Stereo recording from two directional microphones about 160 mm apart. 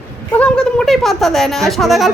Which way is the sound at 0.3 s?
5° left (ahead or behind).